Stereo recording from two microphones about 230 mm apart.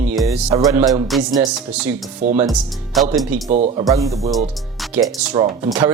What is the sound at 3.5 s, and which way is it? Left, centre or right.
Speech, right.